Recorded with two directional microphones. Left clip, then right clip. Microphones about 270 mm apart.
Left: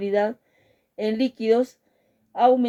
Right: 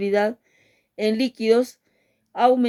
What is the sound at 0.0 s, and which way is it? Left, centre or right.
Speech, right.